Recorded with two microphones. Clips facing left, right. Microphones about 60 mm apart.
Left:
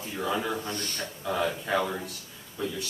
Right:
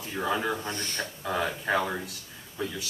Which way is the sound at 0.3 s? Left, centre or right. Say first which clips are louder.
Right 1 dB; centre.